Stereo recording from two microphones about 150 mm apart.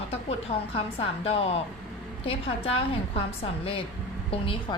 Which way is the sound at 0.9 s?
40° left (ahead or behind).